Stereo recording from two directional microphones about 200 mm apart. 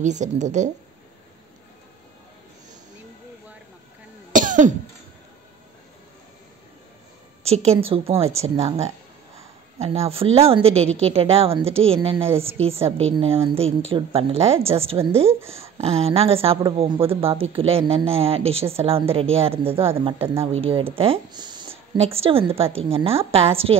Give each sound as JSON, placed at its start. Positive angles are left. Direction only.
{"t": 0.0, "sound": "a woman's voice", "side_deg": -35}
{"t": 4.3, "sound": "cough", "side_deg": -40}
{"t": 7.4, "sound": "a woman's voice", "side_deg": -30}